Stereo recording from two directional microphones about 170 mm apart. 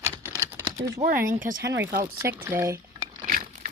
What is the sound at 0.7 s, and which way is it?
Speech, 50° right (ahead or behind).